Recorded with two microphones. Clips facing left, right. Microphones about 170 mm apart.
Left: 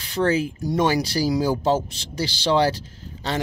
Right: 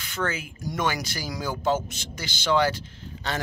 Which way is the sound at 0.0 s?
35° left (ahead or behind).